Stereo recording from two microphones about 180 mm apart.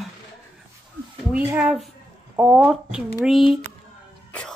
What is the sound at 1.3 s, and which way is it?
A woman's voice, 10° right (ahead or behind).